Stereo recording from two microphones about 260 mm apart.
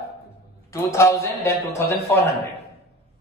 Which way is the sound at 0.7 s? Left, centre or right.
Centre.